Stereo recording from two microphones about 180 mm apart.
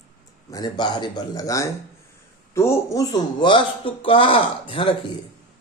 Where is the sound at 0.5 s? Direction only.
25° left (ahead or behind).